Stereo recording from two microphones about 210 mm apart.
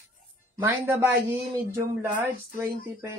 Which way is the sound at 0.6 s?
10° right (ahead or behind).